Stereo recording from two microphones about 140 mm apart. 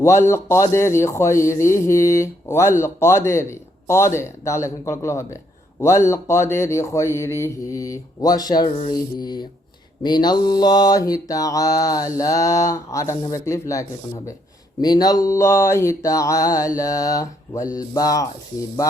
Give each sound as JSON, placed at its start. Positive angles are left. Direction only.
{"t": 0.0, "sound": "mantra", "side_deg": 20}